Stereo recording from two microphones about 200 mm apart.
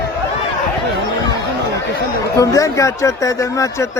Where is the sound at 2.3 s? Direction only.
15° left (ahead or behind).